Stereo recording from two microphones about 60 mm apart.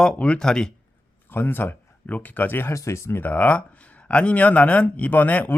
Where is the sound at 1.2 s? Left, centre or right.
Left.